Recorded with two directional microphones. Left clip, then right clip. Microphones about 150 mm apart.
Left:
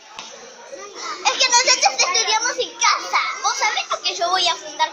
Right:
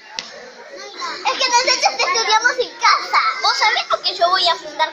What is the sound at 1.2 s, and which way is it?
Children playing, 10° left (ahead or behind).